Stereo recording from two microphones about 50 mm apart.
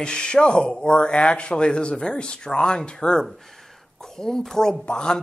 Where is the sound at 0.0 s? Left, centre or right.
Centre.